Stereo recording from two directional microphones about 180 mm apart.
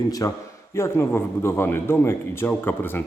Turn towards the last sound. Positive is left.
turn(degrees=10)  # may be behind; listen again after turning